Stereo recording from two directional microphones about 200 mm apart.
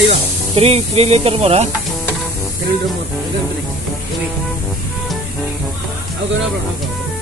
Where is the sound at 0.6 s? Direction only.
30° right (ahead or behind).